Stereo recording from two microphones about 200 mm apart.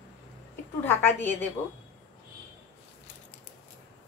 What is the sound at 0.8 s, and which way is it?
Speech, 10° left (ahead or behind).